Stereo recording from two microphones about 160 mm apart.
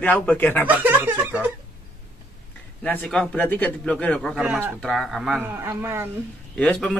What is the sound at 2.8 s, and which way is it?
Speech, 10° left (ahead or behind).